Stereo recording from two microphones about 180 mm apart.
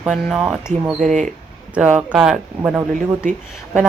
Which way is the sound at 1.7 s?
5° right (ahead or behind).